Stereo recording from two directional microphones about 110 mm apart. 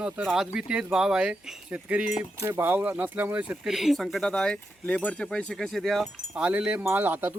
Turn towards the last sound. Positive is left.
turn(degrees=-20)  # may be behind; listen again after turning